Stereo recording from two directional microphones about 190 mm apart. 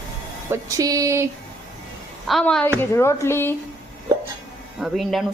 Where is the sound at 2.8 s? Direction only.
15° left (ahead or behind).